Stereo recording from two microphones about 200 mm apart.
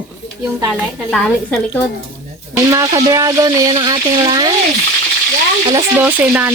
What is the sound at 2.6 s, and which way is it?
Speech, 15° right (ahead or behind).